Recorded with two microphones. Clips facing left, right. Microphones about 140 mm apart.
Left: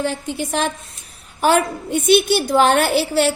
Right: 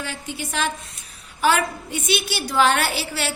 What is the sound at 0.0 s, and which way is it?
A woman's voice, 50° left (ahead or behind).